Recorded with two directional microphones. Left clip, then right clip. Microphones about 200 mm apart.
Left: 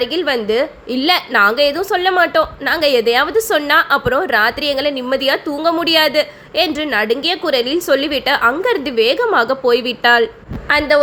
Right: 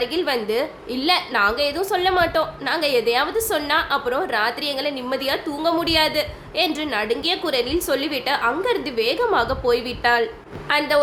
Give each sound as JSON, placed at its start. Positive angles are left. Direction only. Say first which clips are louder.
{"t": 0.0, "sound": "a woman's voice", "louder": "left 5 dB", "side_deg": 25}